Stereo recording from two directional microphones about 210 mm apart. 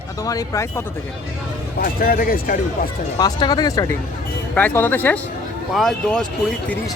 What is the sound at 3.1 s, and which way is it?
Speech, 20° left (ahead or behind).